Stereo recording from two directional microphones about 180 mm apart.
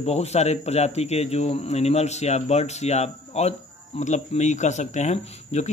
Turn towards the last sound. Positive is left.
turn(degrees=40)  # may be behind; listen again after turning